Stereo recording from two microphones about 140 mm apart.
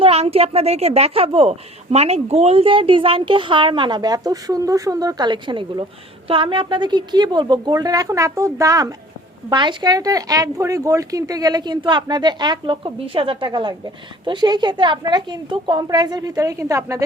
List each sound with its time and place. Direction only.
0.0 s a woman's voice: 45° right (ahead or behind); by 17.0 s 20° right (ahead or behind)